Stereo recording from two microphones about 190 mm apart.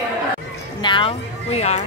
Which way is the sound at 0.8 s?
25° left (ahead or behind).